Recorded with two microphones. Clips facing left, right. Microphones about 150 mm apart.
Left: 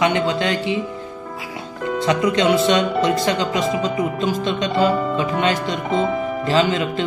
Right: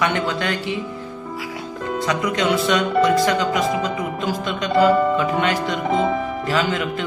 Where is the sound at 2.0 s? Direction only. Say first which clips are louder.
Left 4 dB; 25° left (ahead or behind).